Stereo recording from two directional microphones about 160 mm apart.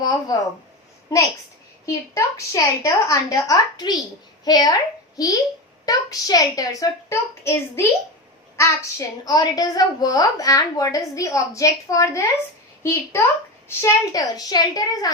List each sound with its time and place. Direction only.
0.0 s speech: 25° left (ahead or behind)
2.1 s a woman's voice: 20° left (ahead or behind)